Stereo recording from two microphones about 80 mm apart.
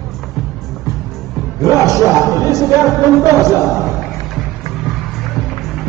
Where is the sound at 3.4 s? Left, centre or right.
Right.